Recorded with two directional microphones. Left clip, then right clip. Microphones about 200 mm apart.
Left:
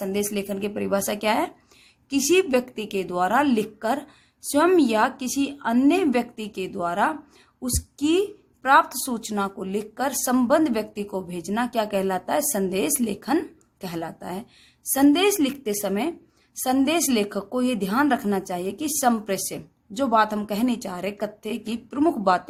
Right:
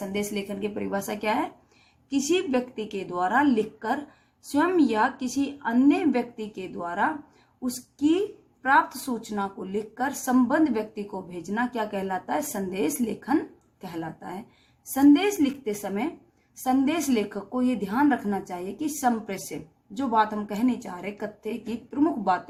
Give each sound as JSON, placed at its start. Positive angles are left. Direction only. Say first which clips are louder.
{"t": 0.1, "sound": "a woman's voice", "louder": "left 4 dB", "side_deg": 45}